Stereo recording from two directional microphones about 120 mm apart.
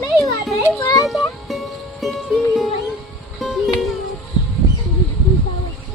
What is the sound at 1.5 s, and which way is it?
Music, centre (ahead or behind).